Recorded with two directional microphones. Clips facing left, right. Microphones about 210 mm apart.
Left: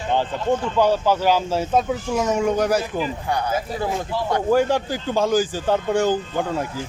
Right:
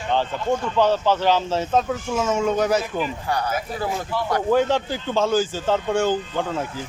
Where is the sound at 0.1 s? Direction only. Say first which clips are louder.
Left 1 dB; 10° left (ahead or behind).